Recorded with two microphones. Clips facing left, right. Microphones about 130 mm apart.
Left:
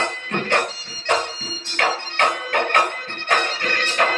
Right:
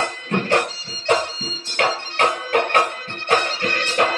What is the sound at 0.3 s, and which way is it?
Music, 35° right (ahead or behind).